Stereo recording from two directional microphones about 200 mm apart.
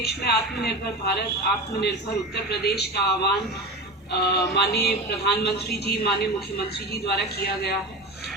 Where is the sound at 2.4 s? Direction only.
55° left (ahead or behind).